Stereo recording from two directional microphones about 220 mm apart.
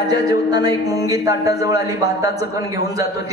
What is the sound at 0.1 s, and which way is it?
A man's voice, 15° right (ahead or behind).